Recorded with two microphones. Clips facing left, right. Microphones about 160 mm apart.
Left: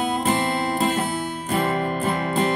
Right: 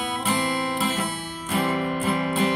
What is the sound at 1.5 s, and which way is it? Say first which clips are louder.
Music: left 1 dB; 40° left (ahead or behind).